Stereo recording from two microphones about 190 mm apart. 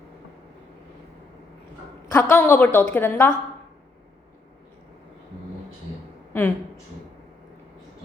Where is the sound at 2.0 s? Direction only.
15° left (ahead or behind).